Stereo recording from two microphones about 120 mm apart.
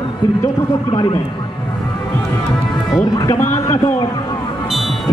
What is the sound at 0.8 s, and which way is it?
Speech, 40° left (ahead or behind).